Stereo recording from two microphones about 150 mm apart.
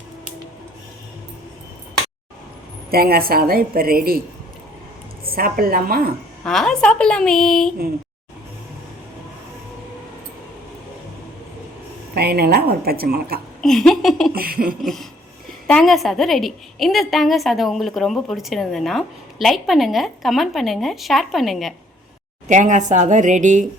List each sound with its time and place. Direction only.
2.9 s a woman's voice: 90° right
5.2 s a woman's voice: 80° right
6.4 s a woman's voice: 5° left (ahead or behind)
12.1 s a woman's voice: 90° right
13.6 s speech: centre (ahead or behind)
14.3 s a woman's voice: 80° right
14.8 s a woman's voice: centre (ahead or behind)
22.4 s a woman's voice: 55° right (ahead or behind)